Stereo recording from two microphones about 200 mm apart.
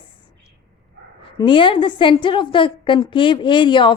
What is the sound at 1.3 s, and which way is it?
A woman's voice, 25° left (ahead or behind).